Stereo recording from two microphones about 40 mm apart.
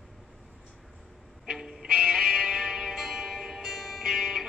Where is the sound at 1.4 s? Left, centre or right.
Centre.